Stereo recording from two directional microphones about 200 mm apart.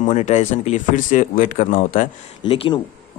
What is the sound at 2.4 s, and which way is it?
Speech, 25° left (ahead or behind).